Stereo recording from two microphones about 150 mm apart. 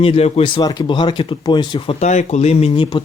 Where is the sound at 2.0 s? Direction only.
50° left (ahead or behind).